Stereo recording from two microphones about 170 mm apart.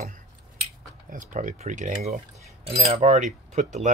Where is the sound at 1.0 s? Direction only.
50° right (ahead or behind).